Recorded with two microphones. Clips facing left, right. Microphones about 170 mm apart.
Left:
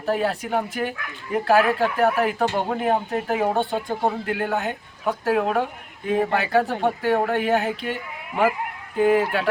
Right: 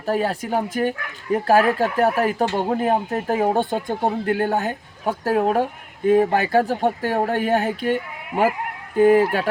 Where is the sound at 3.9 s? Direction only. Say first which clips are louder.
Right 2 dB; 45° right (ahead or behind).